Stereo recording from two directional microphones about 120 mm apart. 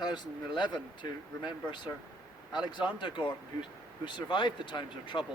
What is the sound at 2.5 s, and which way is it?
Speech, 40° left (ahead or behind).